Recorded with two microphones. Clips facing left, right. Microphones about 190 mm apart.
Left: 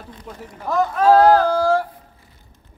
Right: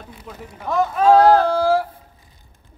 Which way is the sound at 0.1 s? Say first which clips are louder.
Left 2 dB; 5° right (ahead or behind).